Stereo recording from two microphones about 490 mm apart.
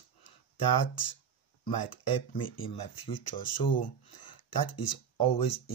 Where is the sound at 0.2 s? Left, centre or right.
Left.